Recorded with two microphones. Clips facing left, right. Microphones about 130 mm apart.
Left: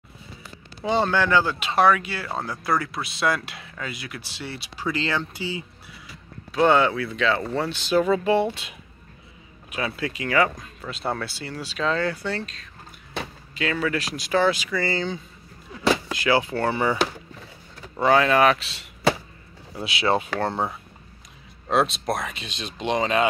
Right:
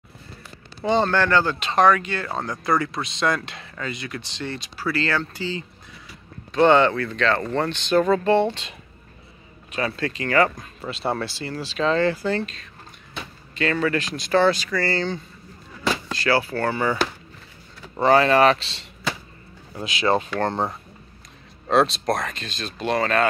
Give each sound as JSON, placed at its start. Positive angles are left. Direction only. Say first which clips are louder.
{"t": 0.8, "sound": "speech", "louder": "right 2 dB", "side_deg": 10}
{"t": 17.8, "sound": "speech", "louder": "right 2 dB", "side_deg": 0}